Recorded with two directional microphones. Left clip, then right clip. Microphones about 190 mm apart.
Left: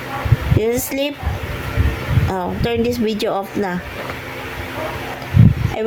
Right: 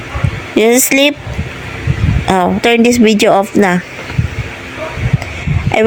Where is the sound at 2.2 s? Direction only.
45° right (ahead or behind).